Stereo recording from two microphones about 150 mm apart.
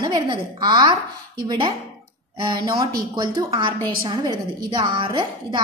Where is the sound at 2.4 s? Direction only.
25° right (ahead or behind).